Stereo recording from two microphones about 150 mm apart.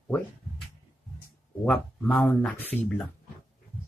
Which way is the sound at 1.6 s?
10° left (ahead or behind).